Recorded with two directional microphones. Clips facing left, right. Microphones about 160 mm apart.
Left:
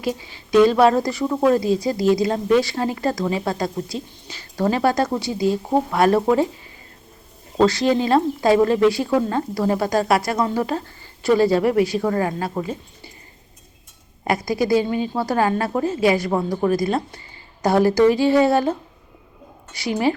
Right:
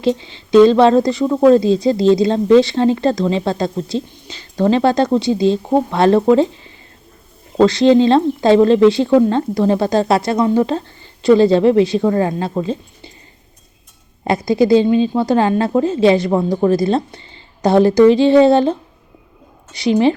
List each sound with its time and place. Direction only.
0.0 s speech: 25° right (ahead or behind)
14.3 s speech: 25° right (ahead or behind)